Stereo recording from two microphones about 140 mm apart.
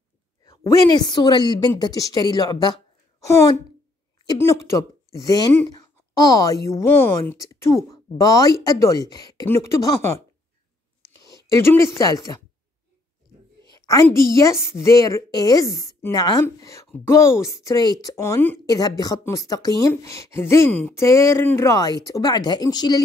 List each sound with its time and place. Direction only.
0.8 s a woman's voice: 30° left (ahead or behind)
11.1 s a sound: 25° left (ahead or behind)
12.0 s a woman's voice: 25° left (ahead or behind)
13.7 s a sound: 25° left (ahead or behind)
14.3 s a woman's voice: 20° left (ahead or behind)
18.7 s a woman's voice: 25° left (ahead or behind)